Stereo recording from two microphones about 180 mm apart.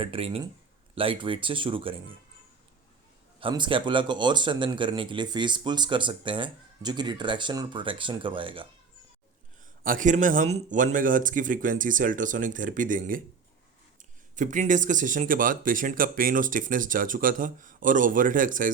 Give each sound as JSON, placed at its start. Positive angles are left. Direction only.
{"t": 0.0, "sound": "a man's voice", "side_deg": -30}
{"t": 3.4, "sound": "a man's voice", "side_deg": -25}
{"t": 9.8, "sound": "speech", "side_deg": -50}